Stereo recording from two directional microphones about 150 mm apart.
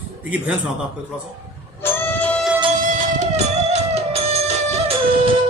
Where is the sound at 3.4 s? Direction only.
50° right (ahead or behind).